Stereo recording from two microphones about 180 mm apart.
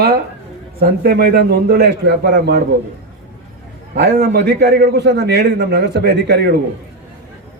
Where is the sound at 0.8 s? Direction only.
60° right (ahead or behind).